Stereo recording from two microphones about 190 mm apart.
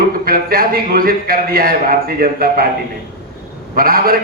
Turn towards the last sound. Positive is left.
turn(degrees=-50)  # may be behind; listen again after turning